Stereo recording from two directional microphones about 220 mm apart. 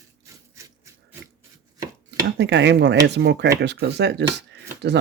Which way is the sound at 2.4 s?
55° right (ahead or behind).